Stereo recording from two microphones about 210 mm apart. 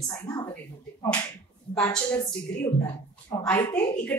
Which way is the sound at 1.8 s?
10° left (ahead or behind).